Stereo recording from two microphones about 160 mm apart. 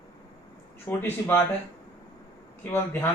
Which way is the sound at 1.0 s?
15° left (ahead or behind).